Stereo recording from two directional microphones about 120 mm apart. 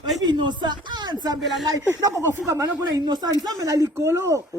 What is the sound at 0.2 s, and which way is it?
Speech, 40° right (ahead or behind).